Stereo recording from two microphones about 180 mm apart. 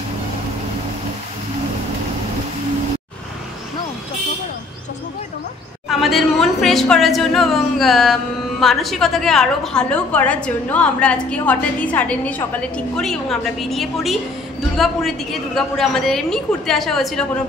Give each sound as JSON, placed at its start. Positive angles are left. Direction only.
{"t": 5.9, "sound": "a woman's voice", "side_deg": 0}